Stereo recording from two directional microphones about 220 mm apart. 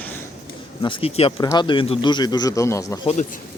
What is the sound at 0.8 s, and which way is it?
Speech, 25° left (ahead or behind).